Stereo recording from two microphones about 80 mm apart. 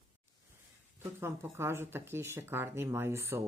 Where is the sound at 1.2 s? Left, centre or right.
Right.